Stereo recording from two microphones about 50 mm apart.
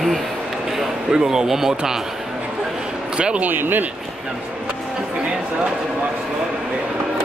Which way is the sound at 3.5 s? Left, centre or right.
Right.